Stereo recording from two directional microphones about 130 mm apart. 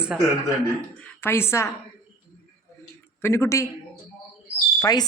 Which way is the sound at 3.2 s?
20° left (ahead or behind).